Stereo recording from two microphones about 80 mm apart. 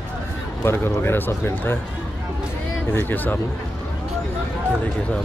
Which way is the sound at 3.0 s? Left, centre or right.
Left.